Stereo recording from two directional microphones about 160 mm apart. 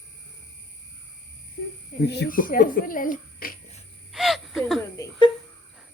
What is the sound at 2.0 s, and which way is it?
Speech, 90° left.